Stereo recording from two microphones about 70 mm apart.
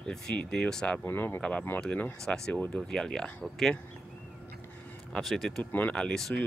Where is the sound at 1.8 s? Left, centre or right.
Centre.